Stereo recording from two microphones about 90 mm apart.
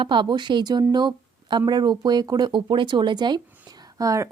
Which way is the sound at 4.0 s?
35° right (ahead or behind).